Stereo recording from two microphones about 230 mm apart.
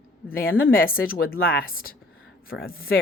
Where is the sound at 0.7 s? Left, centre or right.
Left.